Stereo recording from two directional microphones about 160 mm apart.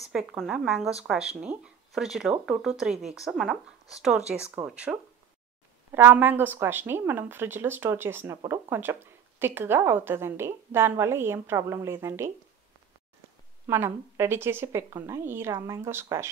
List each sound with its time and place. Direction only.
0.1 s speech: 5° right (ahead or behind)
13.7 s speech: 15° right (ahead or behind)